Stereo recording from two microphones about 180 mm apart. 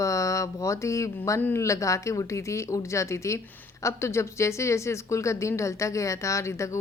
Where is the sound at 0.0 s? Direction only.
15° left (ahead or behind).